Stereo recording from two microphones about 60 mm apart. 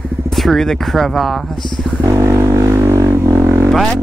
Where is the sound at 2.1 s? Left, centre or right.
Right.